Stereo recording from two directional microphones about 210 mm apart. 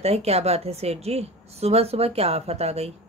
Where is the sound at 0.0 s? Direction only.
30° right (ahead or behind).